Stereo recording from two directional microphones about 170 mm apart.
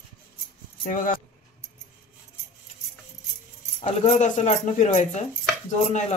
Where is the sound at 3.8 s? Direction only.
40° left (ahead or behind).